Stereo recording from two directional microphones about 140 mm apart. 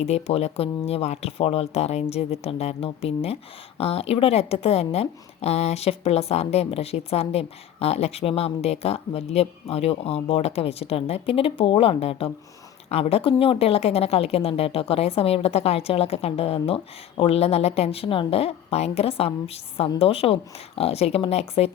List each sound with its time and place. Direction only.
0.0 s a woman's voice: 50° left (ahead or behind)